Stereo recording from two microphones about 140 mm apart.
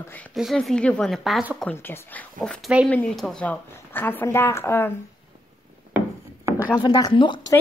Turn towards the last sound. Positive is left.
turn(degrees=35)  # may be behind; listen again after turning